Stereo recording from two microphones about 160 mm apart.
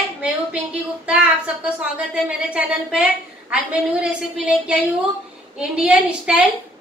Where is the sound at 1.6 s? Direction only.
5° right (ahead or behind).